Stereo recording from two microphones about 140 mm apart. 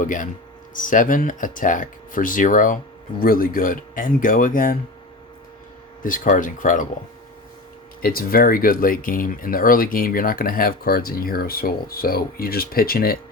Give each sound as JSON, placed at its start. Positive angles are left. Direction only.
{"t": 0.0, "sound": "speech", "side_deg": 70}
{"t": 3.2, "sound": "speech", "side_deg": 90}
{"t": 6.0, "sound": "speech", "side_deg": 70}
{"t": 8.0, "sound": "speech", "side_deg": 90}